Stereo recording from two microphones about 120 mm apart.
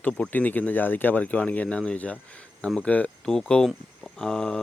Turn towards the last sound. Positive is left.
turn(degrees=5)  # may be behind; listen again after turning